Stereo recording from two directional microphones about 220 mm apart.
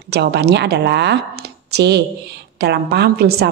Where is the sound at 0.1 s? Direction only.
50° right (ahead or behind).